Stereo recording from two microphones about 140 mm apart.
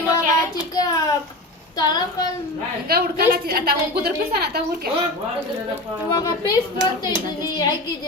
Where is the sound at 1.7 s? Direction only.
25° left (ahead or behind).